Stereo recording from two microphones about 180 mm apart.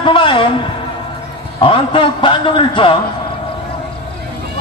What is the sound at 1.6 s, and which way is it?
A man's voice, 30° left (ahead or behind).